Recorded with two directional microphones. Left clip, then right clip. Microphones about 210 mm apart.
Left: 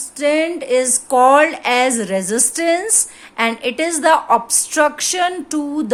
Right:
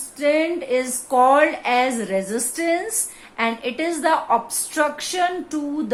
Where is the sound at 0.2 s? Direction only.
40° left (ahead or behind).